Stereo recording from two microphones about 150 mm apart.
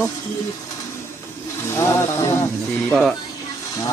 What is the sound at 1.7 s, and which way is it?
Speech, 15° left (ahead or behind).